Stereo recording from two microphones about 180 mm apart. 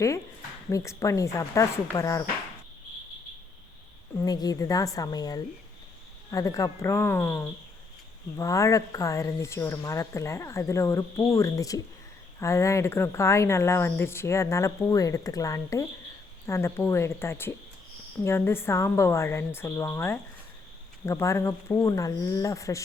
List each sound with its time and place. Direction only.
0.7 s speech: 15° left (ahead or behind)
4.2 s a woman's voice: 20° left (ahead or behind)